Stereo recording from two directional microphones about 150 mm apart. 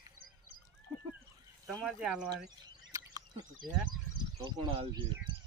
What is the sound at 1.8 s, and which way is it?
Speech, 5° right (ahead or behind).